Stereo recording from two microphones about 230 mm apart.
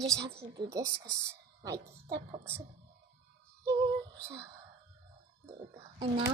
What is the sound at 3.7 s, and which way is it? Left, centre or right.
Female singing, centre.